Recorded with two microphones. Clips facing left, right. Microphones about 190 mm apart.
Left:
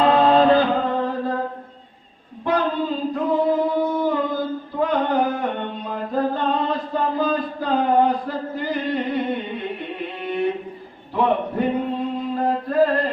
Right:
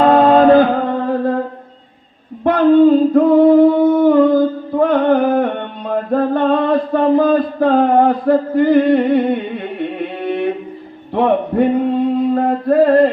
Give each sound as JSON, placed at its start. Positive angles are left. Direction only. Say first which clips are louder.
{"t": 0.0, "sound": "music", "louder": "right 6 dB", "side_deg": -50}
{"t": 2.4, "sound": "singing", "louder": "right 12 dB", "side_deg": -60}
{"t": 10.2, "sound": "a sound", "louder": "right 4 dB", "side_deg": -60}
{"t": 11.1, "sound": "a man's voice", "louder": "right 6 dB", "side_deg": -60}
{"t": 12.3, "sound": "music", "louder": "right 8 dB", "side_deg": -60}